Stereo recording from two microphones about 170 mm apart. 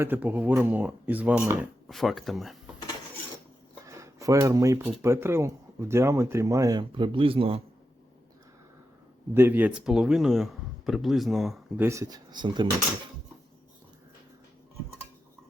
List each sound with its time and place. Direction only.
0.0 s speech: 10° right (ahead or behind)
3.8 s speech: 20° right (ahead or behind)
9.3 s speech: 10° right (ahead or behind)
11.8 s speech: 15° right (ahead or behind)